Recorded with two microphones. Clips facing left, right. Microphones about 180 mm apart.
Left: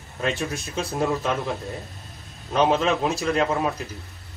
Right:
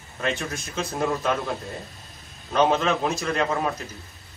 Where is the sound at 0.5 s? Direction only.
35° left (ahead or behind).